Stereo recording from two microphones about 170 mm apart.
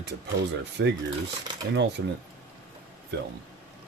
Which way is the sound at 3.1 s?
90° right.